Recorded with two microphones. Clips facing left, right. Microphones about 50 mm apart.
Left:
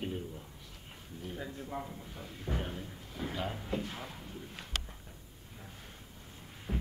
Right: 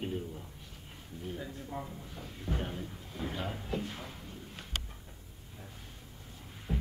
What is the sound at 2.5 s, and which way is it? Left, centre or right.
Speech, left.